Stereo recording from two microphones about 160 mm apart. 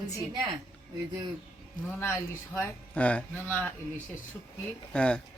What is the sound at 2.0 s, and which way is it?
Speech, 15° left (ahead or behind).